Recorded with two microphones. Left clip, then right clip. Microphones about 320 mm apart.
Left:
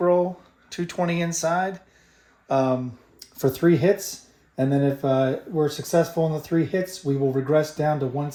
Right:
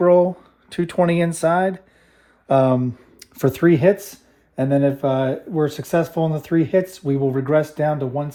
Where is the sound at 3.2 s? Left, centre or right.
Right.